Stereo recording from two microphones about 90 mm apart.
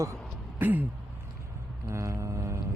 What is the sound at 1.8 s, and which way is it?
Mantra, 35° right (ahead or behind).